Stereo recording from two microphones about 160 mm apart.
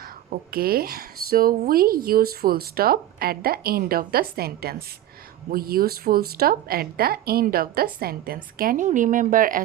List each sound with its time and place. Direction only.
0.5 s a woman's voice: 70° right (ahead or behind)